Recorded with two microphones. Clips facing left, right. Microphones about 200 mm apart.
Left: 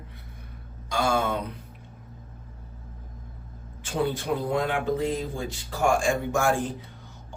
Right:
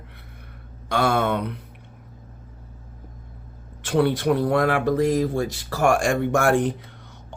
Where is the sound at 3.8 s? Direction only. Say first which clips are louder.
Right 7 dB; 75° right (ahead or behind).